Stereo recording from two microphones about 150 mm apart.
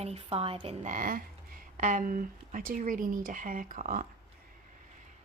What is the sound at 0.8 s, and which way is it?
Speech, 65° right (ahead or behind).